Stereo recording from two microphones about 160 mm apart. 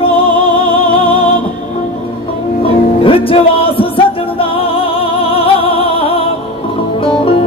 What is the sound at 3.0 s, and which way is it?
Music, 35° left (ahead or behind).